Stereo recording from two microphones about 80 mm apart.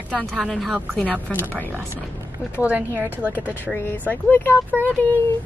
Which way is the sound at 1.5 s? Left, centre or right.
Centre.